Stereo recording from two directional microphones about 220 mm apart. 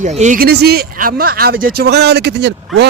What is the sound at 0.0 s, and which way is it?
Speech, 35° right (ahead or behind).